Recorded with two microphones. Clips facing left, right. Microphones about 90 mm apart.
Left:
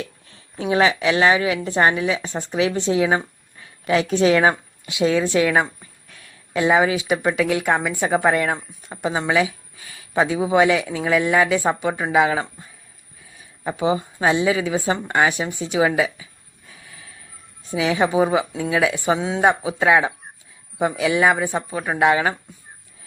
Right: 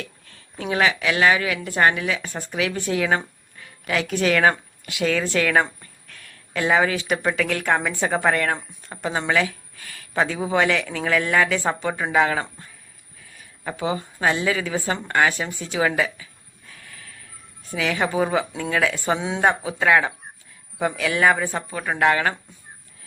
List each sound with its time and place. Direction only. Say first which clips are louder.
0.0 s a sound: left 4 dB; 20° left (ahead or behind)
0.6 s a woman's voice: left 4 dB; 25° left (ahead or behind)
19.2 s speech: left 2 dB; centre (ahead or behind)
19.5 s speech: left 2 dB; 15° left (ahead or behind)